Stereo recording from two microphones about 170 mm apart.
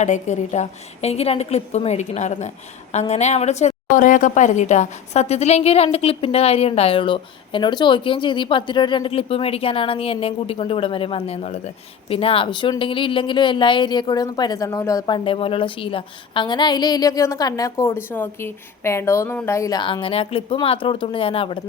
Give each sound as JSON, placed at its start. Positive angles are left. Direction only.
{"t": 0.0, "sound": "a woman's voice", "side_deg": 45}